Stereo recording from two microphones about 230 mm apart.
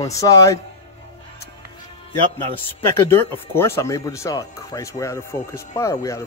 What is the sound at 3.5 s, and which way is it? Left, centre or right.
Speech, centre.